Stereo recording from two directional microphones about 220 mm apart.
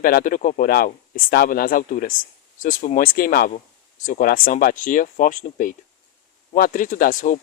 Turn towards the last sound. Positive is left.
turn(degrees=35)  # may be behind; listen again after turning